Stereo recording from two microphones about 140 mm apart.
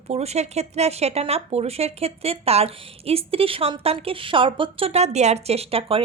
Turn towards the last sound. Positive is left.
turn(degrees=-40)  # may be behind; listen again after turning